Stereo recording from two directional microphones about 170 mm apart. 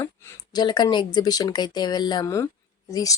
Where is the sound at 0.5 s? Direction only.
25° left (ahead or behind).